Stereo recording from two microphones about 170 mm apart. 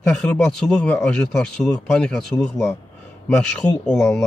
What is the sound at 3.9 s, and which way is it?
Speech, 5° left (ahead or behind).